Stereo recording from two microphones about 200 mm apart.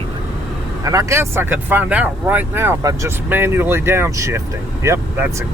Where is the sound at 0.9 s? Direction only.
15° right (ahead or behind).